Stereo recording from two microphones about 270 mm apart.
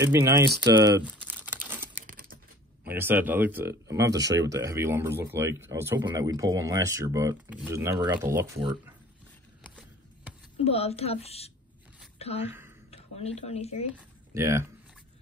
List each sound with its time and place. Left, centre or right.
0.0 s speech: centre
1.0 s crumpling: centre
2.0 s typing: right
2.9 s speech: centre
10.6 s a woman's voice: left
13.9 s speech: centre